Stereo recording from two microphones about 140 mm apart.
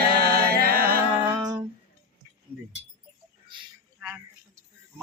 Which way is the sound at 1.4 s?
30° right (ahead or behind).